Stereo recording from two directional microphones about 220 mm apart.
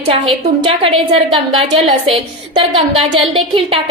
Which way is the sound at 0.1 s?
25° right (ahead or behind).